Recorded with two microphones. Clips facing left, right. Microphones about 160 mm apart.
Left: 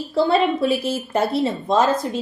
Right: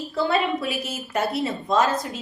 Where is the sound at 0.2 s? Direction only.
30° left (ahead or behind).